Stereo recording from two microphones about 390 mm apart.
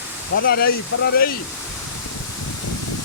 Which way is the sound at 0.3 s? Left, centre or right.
Left.